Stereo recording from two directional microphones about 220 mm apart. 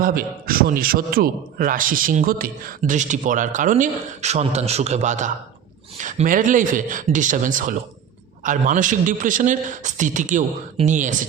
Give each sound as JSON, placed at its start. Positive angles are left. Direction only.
{"t": 0.0, "sound": "a man's voice", "side_deg": -40}